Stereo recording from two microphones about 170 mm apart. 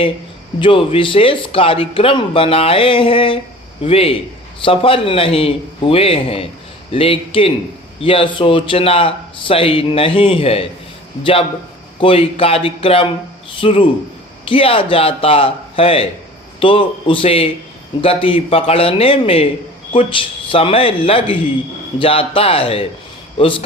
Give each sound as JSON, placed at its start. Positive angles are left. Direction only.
{"t": 0.6, "sound": "speech", "side_deg": 30}